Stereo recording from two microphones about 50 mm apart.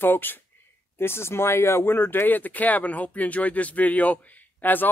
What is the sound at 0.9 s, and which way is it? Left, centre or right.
Speech, left.